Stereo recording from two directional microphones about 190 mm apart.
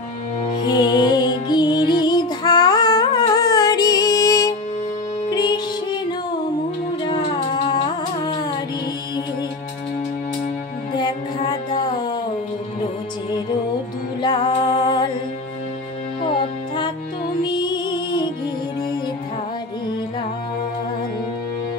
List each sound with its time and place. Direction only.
0.6 s music: 20° left (ahead or behind)
7.0 s music: 25° left (ahead or behind)
11.0 s music: 25° left (ahead or behind)
14.2 s music: 20° left (ahead or behind)
16.3 s music: 25° left (ahead or behind)